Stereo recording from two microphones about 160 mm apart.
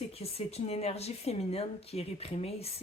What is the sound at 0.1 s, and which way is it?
Speech, 40° left (ahead or behind).